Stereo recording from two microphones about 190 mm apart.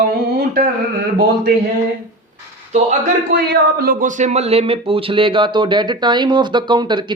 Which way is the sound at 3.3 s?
55° right (ahead or behind).